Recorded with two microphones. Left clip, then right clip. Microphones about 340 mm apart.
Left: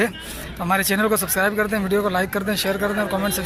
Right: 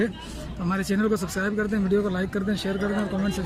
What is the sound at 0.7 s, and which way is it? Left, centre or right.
Speech, centre.